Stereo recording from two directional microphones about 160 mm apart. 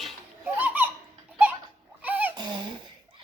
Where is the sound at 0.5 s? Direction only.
10° right (ahead or behind).